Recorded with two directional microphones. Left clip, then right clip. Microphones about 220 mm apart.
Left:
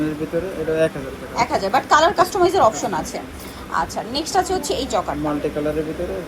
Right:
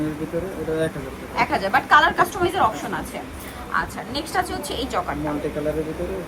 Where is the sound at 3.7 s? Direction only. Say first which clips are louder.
Left 3 dB; 20° left (ahead or behind).